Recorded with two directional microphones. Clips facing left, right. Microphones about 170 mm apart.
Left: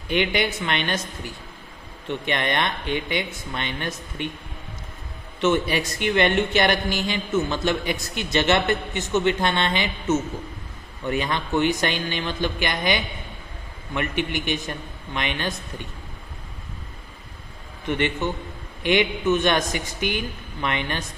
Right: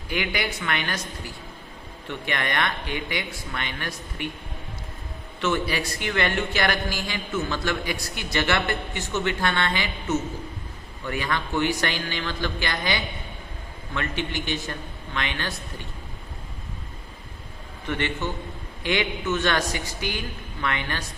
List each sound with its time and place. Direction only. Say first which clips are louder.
0.1 s speech: left 5 dB; 25° left (ahead or behind)
2.0 s speech: left 4 dB; 20° left (ahead or behind)
5.4 s speech: left 4 dB; 20° left (ahead or behind)
17.8 s speech: left 4 dB; 20° left (ahead or behind)